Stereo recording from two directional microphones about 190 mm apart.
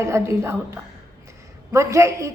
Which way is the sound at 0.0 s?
15° right (ahead or behind).